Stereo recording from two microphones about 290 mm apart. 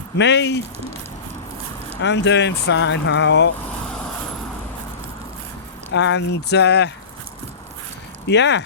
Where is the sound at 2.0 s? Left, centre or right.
Left.